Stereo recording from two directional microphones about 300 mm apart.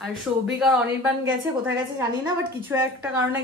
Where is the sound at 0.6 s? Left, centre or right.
Centre.